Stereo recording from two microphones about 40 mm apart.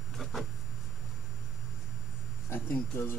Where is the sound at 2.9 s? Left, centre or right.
Left.